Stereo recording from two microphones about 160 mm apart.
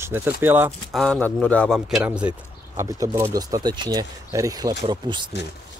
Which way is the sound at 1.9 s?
5° right (ahead or behind).